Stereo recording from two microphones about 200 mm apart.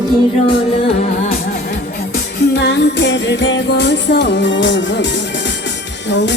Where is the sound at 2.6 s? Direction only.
60° left (ahead or behind).